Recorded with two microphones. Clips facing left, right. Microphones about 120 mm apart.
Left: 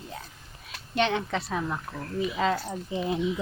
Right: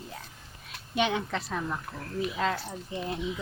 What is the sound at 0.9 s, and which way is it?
Speech, 5° right (ahead or behind).